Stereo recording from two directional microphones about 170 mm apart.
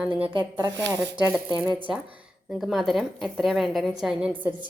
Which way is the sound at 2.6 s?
Centre (ahead or behind).